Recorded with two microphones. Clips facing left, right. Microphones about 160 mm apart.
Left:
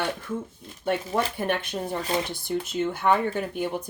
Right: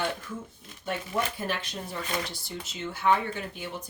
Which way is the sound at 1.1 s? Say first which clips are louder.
Left 5 dB; 60° left (ahead or behind).